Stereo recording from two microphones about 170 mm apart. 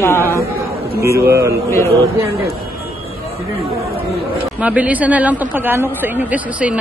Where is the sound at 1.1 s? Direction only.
15° right (ahead or behind).